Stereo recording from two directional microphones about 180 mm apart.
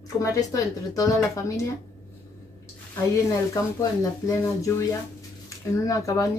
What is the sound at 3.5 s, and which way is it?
Speech, 20° left (ahead or behind).